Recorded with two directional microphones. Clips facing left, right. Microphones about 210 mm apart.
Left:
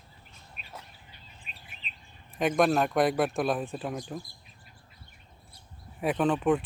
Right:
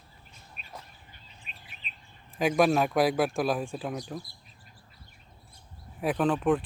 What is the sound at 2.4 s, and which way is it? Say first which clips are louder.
A man's voice: right 1 dB; centre (ahead or behind).